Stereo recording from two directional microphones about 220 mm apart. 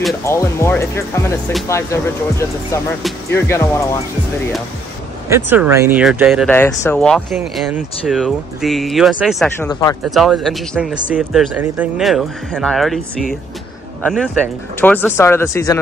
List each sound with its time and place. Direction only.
0.3 s speech: 10° left (ahead or behind)
5.3 s speech: 10° right (ahead or behind)
6.4 s speech: 10° left (ahead or behind)
9.6 s speech: 15° left (ahead or behind)
10.0 s speech: centre (ahead or behind)